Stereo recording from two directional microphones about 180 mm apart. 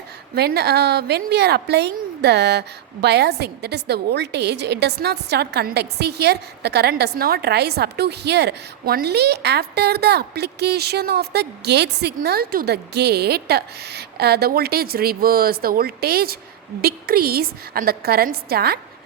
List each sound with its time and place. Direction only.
0.3 s a woman's voice: 60° right (ahead or behind)